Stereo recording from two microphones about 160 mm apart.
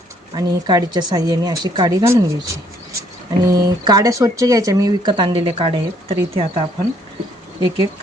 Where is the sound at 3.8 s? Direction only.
20° right (ahead or behind).